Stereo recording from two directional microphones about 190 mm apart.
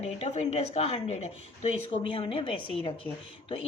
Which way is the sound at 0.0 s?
35° left (ahead or behind).